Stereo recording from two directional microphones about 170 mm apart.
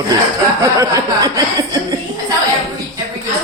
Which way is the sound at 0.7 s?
20° right (ahead or behind).